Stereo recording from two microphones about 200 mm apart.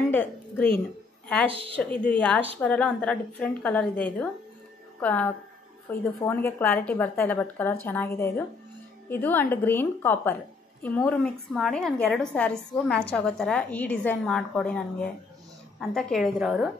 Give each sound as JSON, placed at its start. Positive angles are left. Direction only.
{"t": 0.1, "sound": "a woman's voice", "side_deg": 10}
{"t": 1.5, "sound": "speech", "side_deg": -25}
{"t": 1.8, "sound": "a woman's voice", "side_deg": 5}